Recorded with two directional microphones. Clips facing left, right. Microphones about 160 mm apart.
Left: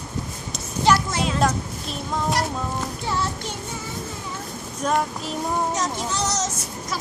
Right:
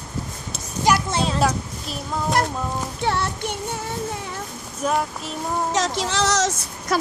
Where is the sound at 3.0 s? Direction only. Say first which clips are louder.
Right 6 dB; 65° right (ahead or behind).